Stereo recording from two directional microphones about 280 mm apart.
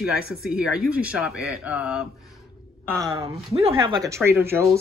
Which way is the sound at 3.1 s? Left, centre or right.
Right.